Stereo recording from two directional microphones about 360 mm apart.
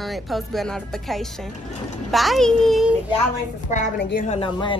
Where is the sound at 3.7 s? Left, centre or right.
Left.